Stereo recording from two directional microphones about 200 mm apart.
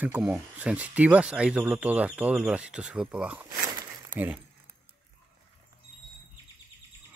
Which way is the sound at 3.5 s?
20° right (ahead or behind).